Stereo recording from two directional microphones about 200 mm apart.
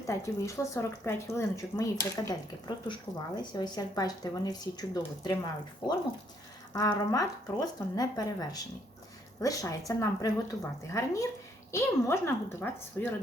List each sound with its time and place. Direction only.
0.0 s speech: 15° left (ahead or behind)
6.7 s speech: 15° left (ahead or behind)